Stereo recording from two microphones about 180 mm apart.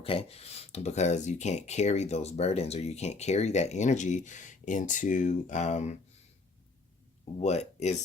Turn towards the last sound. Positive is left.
turn(degrees=40)  # may be behind; listen again after turning